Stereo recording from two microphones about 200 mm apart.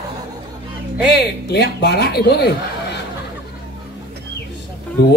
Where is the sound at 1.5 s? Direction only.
55° left (ahead or behind).